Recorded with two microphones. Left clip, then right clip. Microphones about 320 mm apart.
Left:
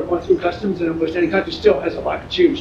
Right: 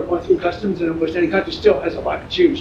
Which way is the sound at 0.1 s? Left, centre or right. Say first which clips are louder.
Even; centre.